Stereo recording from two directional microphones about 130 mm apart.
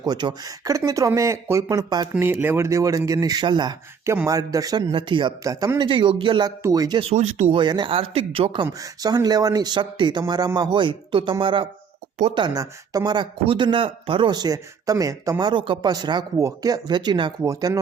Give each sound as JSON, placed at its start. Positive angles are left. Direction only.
{"t": 0.0, "sound": "speech", "side_deg": -30}
{"t": 2.1, "sound": "speech", "side_deg": -15}
{"t": 4.9, "sound": "speech", "side_deg": -40}
{"t": 5.4, "sound": "speech", "side_deg": -25}
{"t": 6.6, "sound": "speech", "side_deg": -25}
{"t": 7.1, "sound": "speech", "side_deg": -55}
{"t": 7.5, "sound": "speech", "side_deg": -35}
{"t": 8.8, "sound": "speech", "side_deg": -30}
{"t": 17.4, "sound": "speech", "side_deg": -25}